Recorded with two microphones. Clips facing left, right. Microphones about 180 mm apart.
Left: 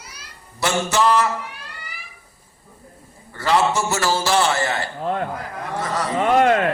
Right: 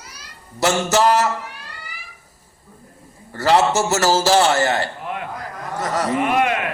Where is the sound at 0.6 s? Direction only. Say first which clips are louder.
Right 3 dB; 40° right (ahead or behind).